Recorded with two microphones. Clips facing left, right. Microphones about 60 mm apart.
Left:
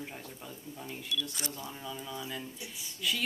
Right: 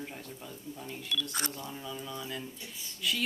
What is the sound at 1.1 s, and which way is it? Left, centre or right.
Speech, right.